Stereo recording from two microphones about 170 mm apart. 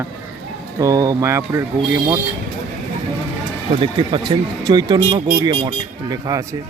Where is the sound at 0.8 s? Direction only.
20° right (ahead or behind).